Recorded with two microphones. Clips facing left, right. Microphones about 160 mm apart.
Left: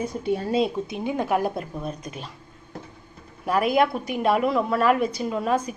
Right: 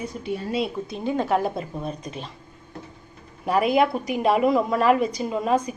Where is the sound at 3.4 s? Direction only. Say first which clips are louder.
Right 1 dB; centre (ahead or behind).